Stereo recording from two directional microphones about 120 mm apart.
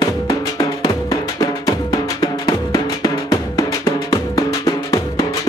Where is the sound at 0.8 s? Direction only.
30° left (ahead or behind).